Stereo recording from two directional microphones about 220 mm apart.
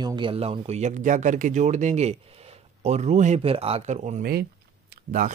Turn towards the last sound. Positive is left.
turn(degrees=-40)  # may be behind; listen again after turning